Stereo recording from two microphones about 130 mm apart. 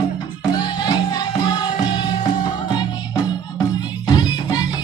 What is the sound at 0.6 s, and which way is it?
Music, 35° left (ahead or behind).